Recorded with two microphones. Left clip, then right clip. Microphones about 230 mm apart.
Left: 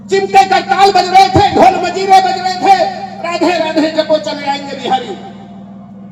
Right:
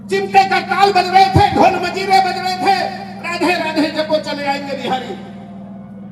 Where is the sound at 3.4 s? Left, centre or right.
Right.